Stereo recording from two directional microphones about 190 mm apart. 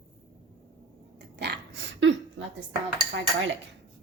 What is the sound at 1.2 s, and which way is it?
Dog, 60° right (ahead or behind).